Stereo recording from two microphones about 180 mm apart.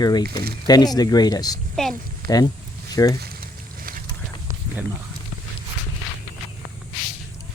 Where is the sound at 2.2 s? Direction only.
20° left (ahead or behind).